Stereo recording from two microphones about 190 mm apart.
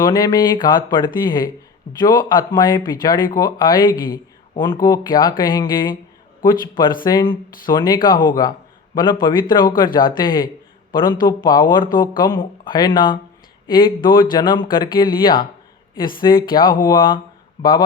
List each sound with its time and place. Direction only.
0.0 s speech: 20° left (ahead or behind)